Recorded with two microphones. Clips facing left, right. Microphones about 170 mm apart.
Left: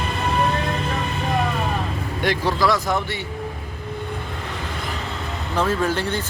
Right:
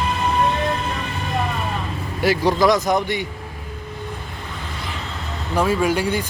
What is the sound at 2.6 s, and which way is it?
Speech, 20° right (ahead or behind).